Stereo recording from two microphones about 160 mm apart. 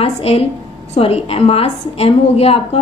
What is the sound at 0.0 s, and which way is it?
A woman's voice, 40° left (ahead or behind).